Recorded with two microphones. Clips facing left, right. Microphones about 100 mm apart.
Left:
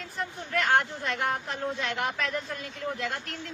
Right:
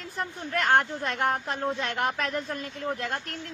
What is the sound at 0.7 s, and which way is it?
A woman's voice, 50° right (ahead or behind).